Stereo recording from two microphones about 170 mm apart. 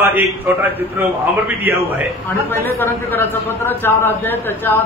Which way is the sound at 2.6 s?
10° left (ahead or behind).